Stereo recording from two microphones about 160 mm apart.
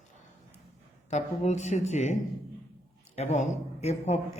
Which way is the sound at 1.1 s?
45° left (ahead or behind).